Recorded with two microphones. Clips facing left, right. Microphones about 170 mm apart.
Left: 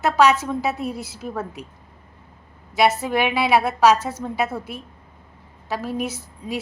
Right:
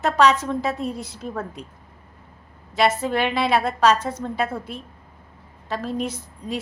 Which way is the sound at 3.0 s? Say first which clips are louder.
Left 1 dB; 10° left (ahead or behind).